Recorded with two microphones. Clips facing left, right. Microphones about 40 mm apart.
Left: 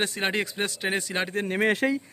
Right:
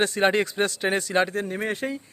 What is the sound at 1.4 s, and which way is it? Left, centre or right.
Speech, left.